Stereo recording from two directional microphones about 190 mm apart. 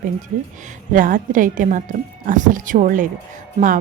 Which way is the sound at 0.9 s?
45° right (ahead or behind).